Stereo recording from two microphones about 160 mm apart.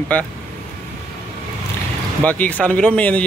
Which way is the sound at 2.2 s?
10° left (ahead or behind).